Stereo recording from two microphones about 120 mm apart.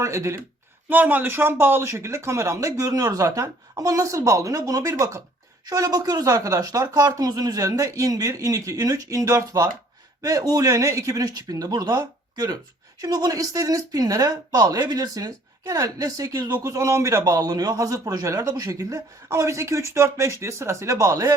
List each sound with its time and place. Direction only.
0.0 s speech: 25° right (ahead or behind)